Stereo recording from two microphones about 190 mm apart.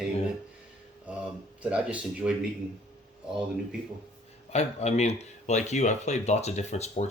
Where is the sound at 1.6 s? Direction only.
5° right (ahead or behind).